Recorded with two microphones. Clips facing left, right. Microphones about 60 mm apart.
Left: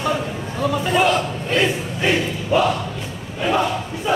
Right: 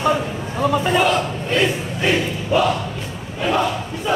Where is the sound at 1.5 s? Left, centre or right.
Centre.